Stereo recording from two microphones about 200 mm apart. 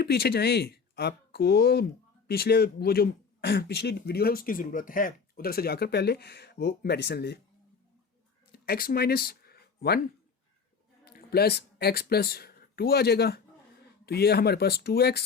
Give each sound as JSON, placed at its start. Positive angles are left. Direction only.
{"t": 0.0, "sound": "speech", "side_deg": 50}
{"t": 8.5, "sound": "speech", "side_deg": 50}
{"t": 11.0, "sound": "speech", "side_deg": 50}